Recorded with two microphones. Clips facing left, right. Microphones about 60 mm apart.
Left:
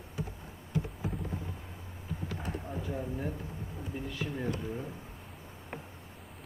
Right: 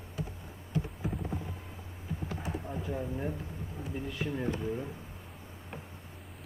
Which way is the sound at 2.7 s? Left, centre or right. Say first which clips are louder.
Right 1 dB; centre.